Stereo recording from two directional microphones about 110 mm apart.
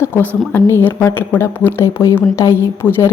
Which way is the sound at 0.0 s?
20° left (ahead or behind).